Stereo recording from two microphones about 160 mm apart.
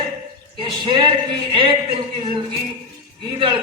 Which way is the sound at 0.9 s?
30° right (ahead or behind).